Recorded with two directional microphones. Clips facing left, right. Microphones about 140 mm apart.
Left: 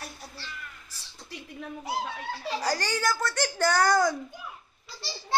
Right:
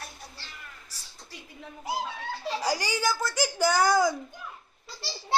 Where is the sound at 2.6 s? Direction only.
10° right (ahead or behind).